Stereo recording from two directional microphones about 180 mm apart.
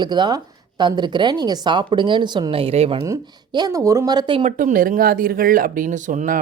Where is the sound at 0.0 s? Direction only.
25° right (ahead or behind).